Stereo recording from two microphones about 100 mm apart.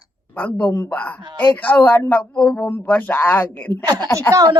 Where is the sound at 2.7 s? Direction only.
20° left (ahead or behind).